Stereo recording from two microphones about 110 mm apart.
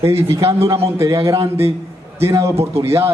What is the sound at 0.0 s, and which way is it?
A man's voice, 25° right (ahead or behind).